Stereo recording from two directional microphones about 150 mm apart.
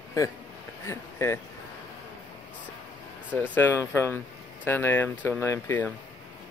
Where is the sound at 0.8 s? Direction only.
15° left (ahead or behind).